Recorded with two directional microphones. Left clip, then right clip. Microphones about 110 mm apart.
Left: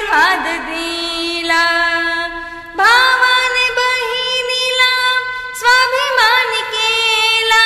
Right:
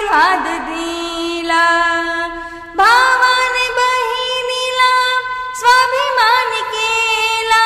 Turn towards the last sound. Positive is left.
turn(degrees=-30)  # may be behind; listen again after turning